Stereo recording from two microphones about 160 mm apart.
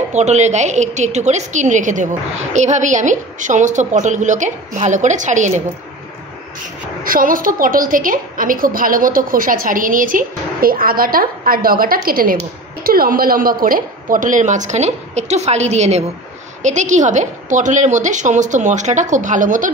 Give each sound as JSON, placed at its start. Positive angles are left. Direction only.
{"t": 0.1, "sound": "a woman's voice", "side_deg": -45}
{"t": 7.0, "sound": "a woman's voice", "side_deg": -60}